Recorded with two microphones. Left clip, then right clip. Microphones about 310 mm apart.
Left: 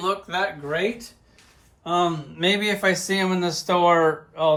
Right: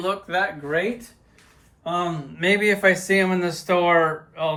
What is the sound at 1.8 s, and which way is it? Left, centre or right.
Speech, centre.